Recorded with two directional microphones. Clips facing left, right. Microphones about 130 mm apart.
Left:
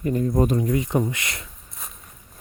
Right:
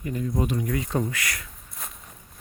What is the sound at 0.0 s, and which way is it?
Speech, 45° left (ahead or behind).